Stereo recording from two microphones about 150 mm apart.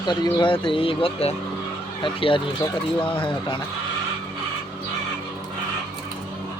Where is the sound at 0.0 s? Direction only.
30° left (ahead or behind).